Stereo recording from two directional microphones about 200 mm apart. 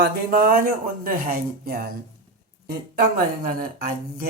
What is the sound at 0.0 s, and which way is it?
Speech, 50° right (ahead or behind).